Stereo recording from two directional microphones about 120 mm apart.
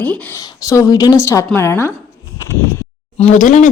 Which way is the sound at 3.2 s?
90° left.